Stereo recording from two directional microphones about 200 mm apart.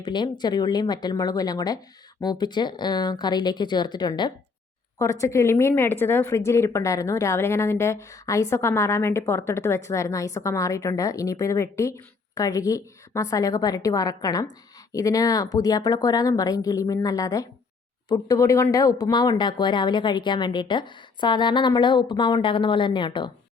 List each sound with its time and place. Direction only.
0.0 s a woman's voice: 20° left (ahead or behind)